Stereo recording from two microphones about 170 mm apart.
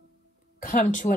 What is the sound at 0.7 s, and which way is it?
Speech, 45° left (ahead or behind).